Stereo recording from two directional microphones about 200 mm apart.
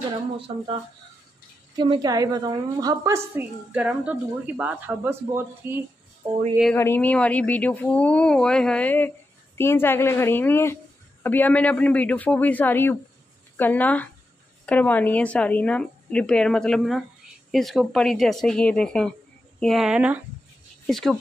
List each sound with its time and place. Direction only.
0.5 s speech: 25° right (ahead or behind)
1.8 s a woman's voice: 20° right (ahead or behind)
6.7 s speech: 10° left (ahead or behind)